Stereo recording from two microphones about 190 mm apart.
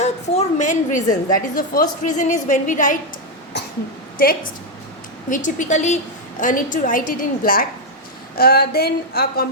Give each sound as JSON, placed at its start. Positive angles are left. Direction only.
{"t": 0.0, "sound": "a woman's voice", "side_deg": 40}
{"t": 4.2, "sound": "a woman's voice", "side_deg": 50}
{"t": 8.4, "sound": "a sound", "side_deg": 55}